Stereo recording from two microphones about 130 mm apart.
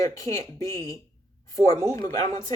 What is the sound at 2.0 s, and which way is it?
Speech, 60° right (ahead or behind).